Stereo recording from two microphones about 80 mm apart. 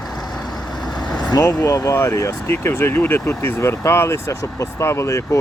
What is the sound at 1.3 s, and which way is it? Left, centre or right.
Speech, left.